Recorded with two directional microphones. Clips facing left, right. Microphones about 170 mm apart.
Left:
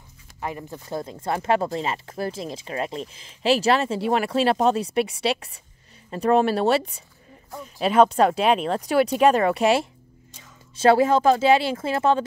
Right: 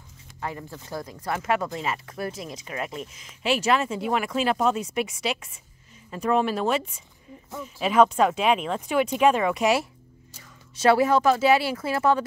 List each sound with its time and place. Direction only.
0.4 s speech: 20° left (ahead or behind)